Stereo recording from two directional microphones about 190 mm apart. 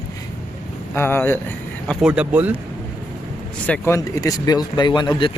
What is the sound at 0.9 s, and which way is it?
Speech, 10° left (ahead or behind).